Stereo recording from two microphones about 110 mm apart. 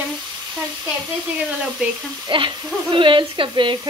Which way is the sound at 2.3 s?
50° right (ahead or behind).